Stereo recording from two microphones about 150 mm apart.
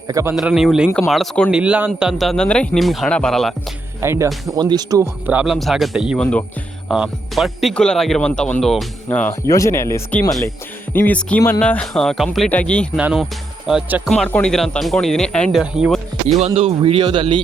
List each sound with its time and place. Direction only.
0.1 s speech: 20° right (ahead or behind)
0.3 s speech: 5° right (ahead or behind)
4.0 s speech: 15° right (ahead or behind)
5.2 s speech: 10° right (ahead or behind)
9.5 s speech: 20° left (ahead or behind)
10.9 s music: 10° left (ahead or behind)
11.6 s speech: 5° left (ahead or behind)
12.5 s music: 10° left (ahead or behind)
13.0 s speech: 10° right (ahead or behind)
16.6 s a man's voice: 40° right (ahead or behind)